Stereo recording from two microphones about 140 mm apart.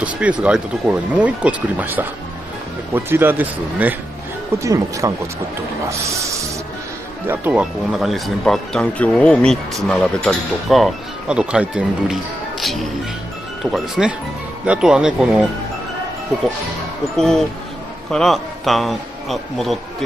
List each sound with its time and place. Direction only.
0.0 s speech: 10° right (ahead or behind)
5.9 s snake: 20° right (ahead or behind)
7.2 s speech: 10° right (ahead or behind)
18.1 s a man's voice: centre (ahead or behind)